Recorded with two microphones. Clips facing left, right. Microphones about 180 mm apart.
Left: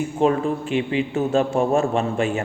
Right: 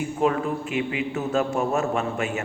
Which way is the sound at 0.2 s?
30° left (ahead or behind).